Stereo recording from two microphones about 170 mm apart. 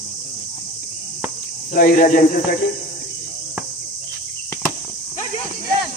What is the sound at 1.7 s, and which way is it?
Speech, 55° left (ahead or behind).